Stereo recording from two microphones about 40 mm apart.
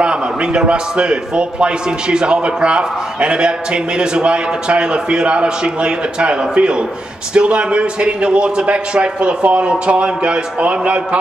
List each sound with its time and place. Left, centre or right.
0.0 s a man's voice: right